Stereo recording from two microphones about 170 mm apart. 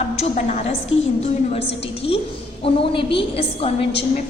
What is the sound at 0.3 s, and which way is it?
Speech, 40° left (ahead or behind).